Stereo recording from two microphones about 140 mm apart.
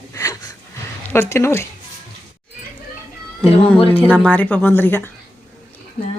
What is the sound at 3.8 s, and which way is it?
Speech, 40° left (ahead or behind).